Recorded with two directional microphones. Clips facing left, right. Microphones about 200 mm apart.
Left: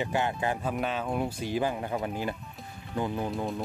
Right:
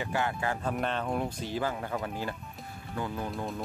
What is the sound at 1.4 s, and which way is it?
Speech, 15° left (ahead or behind).